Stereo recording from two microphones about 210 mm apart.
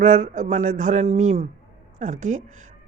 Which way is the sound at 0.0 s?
40° right (ahead or behind).